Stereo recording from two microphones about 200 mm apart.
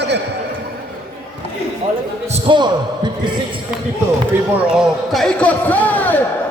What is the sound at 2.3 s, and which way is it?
Speech, 25° right (ahead or behind).